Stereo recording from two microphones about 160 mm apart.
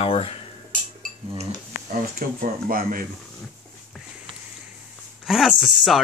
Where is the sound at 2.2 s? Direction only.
65° right (ahead or behind).